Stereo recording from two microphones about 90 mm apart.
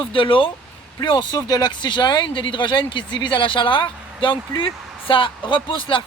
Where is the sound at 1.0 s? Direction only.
65° left (ahead or behind).